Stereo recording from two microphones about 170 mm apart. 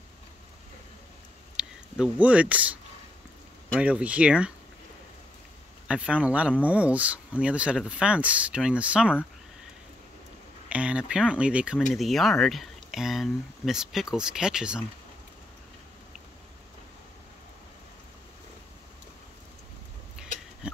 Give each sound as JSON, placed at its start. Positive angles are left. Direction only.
{"t": 1.6, "sound": "speech", "side_deg": -5}
{"t": 3.8, "sound": "speech", "side_deg": -5}
{"t": 5.9, "sound": "speech", "side_deg": -5}
{"t": 10.7, "sound": "speech", "side_deg": -5}
{"t": 20.2, "sound": "a sound", "side_deg": -5}